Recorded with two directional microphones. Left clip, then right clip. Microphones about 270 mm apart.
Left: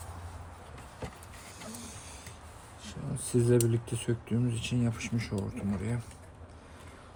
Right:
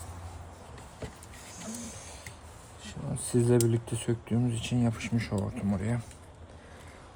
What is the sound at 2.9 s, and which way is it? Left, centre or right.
Speech, right.